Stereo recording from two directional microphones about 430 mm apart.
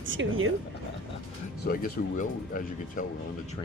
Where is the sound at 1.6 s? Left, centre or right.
Centre.